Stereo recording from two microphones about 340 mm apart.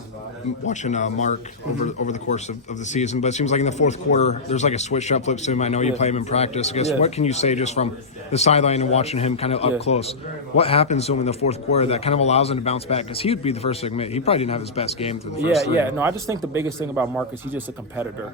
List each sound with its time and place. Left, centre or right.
0.7 s speech: left
2.8 s speech: left
15.4 s speech: centre